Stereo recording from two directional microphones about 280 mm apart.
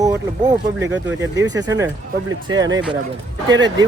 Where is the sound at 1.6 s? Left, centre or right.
Centre.